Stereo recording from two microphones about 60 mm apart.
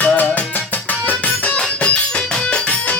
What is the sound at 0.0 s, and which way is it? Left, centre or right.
Music, left.